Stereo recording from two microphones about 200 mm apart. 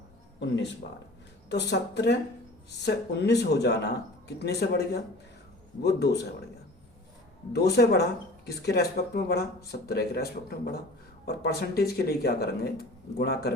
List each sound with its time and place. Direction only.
0.3 s speech: 60° left (ahead or behind)
7.5 s speech: 55° left (ahead or behind)
11.3 s speech: 50° left (ahead or behind)